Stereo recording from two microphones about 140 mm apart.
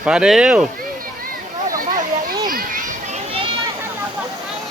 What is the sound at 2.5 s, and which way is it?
Children playing, 75° right (ahead or behind).